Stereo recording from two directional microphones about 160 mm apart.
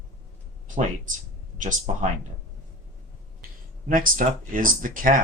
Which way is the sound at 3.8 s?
60° right (ahead or behind).